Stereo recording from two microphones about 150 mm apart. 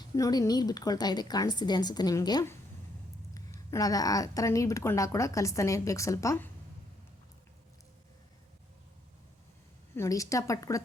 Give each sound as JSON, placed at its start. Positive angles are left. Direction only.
{"t": 0.2, "sound": "speech", "side_deg": 25}
{"t": 9.9, "sound": "speech", "side_deg": 20}